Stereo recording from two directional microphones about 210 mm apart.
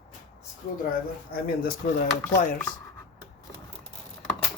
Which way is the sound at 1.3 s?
45° left (ahead or behind).